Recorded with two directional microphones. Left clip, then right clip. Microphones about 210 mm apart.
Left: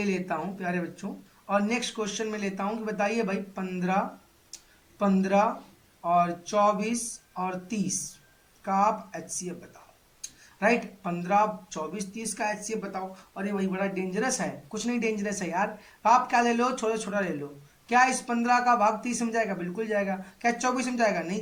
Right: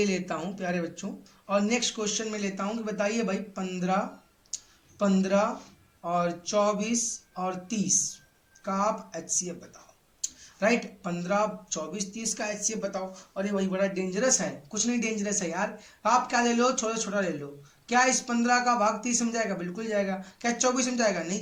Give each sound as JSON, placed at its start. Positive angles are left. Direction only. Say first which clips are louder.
{"t": 0.0, "sound": "speech", "louder": "right 1 dB", "side_deg": -15}
{"t": 4.9, "sound": "speech", "louder": "left 1 dB", "side_deg": -10}
{"t": 10.2, "sound": "a sound", "louder": "right 1 dB", "side_deg": -15}
{"t": 11.9, "sound": "speech", "louder": "even", "side_deg": -15}